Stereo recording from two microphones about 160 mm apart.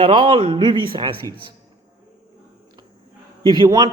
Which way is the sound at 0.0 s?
35° right (ahead or behind).